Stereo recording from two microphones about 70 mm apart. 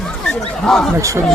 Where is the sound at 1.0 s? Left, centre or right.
Right.